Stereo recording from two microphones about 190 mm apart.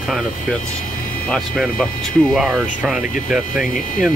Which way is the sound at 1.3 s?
Centre (ahead or behind).